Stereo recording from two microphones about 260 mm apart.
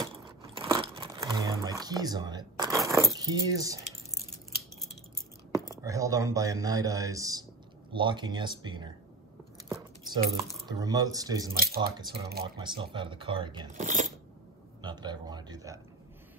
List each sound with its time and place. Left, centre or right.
0.0 s biting: centre
2.9 s speech: centre
5.7 s speech: centre
9.7 s a sound: centre
10.7 s speech: centre
11.5 s speech: right
12.5 s speech: centre
14.8 s a sound: centre